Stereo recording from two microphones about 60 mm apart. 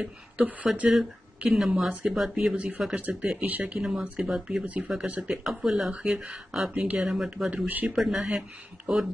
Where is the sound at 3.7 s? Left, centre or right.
Centre.